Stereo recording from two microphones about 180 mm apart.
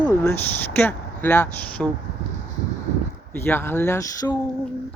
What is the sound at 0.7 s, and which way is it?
Speech, 10° left (ahead or behind).